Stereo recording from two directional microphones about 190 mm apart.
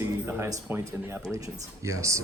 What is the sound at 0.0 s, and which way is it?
Speech, 15° right (ahead or behind).